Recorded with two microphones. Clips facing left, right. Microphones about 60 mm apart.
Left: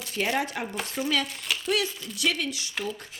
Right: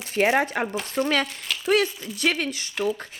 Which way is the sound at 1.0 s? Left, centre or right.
Right.